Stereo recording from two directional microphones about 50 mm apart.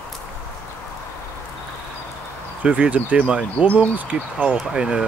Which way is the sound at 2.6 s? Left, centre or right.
Right.